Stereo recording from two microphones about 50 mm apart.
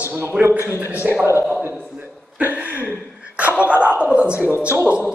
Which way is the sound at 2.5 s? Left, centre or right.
Right.